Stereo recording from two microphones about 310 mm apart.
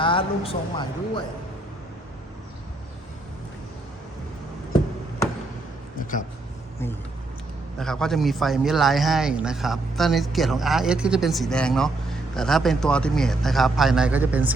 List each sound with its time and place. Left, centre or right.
0.0 s a man's voice: centre
6.0 s a sound: left
7.8 s a man's voice: centre